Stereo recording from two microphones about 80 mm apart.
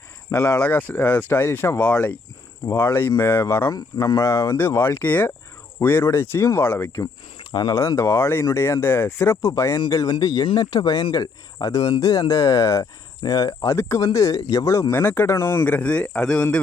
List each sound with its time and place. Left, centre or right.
0.3 s speech: left
2.6 s speech: left
3.8 s speech: left
4.5 s speech: left
7.5 s speech: left
7.8 s speech: left
10.1 s speech: left
13.7 s speech: left
14.0 s speech: left
14.9 s speech: left
15.6 s a man's voice: centre